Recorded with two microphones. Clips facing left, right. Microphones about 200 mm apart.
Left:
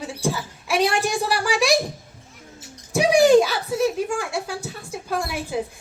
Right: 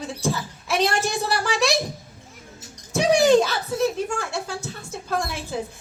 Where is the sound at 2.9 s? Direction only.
10° left (ahead or behind).